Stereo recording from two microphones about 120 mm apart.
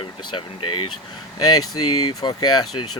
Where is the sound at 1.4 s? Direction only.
35° left (ahead or behind).